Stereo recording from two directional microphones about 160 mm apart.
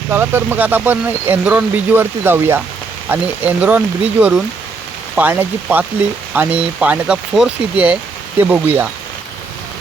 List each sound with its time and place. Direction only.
0.1 s speech: 15° right (ahead or behind)